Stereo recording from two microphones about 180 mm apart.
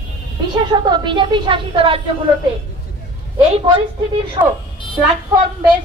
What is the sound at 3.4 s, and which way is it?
A woman's voice, 30° right (ahead or behind).